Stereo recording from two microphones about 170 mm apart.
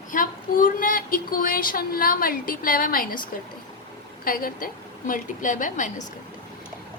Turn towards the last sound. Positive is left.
turn(degrees=50)  # may be behind; listen again after turning